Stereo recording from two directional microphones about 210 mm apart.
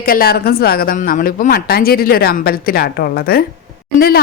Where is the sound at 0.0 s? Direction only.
45° left (ahead or behind).